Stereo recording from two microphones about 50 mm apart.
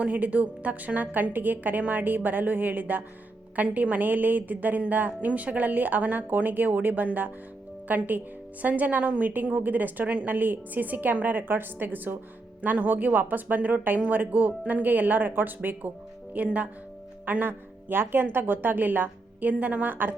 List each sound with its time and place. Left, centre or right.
0.0 s a woman's voice: right
17.2 s speech: right